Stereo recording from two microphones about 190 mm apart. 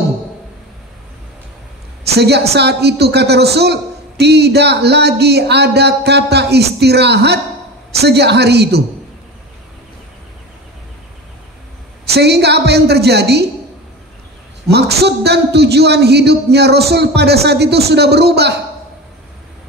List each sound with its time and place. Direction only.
2.0 s a woman's voice: 60° right (ahead or behind)
12.1 s a man's voice: 60° right (ahead or behind)
14.7 s a man's voice: 60° right (ahead or behind)